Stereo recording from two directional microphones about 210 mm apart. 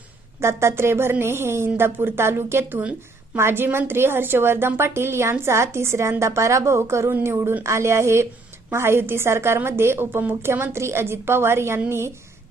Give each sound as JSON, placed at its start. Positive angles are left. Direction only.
{"t": 0.3, "sound": "a woman's voice", "side_deg": -10}